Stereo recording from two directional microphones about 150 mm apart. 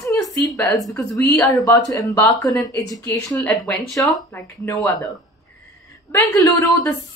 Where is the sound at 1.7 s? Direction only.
25° left (ahead or behind).